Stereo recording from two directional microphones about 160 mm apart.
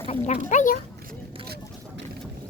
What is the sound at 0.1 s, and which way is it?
Speech, 45° left (ahead or behind).